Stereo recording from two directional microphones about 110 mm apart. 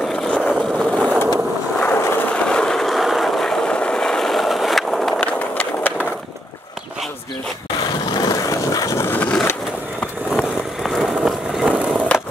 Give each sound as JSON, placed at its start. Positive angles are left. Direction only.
{"t": 0.0, "sound": "vehicle", "side_deg": 5}
{"t": 0.9, "sound": "skateboard", "side_deg": -10}
{"t": 1.8, "sound": "vehicle", "side_deg": 15}
{"t": 5.5, "sound": "a sound", "side_deg": 15}
{"t": 8.1, "sound": "vehicle", "side_deg": 35}
{"t": 10.8, "sound": "vehicle", "side_deg": 0}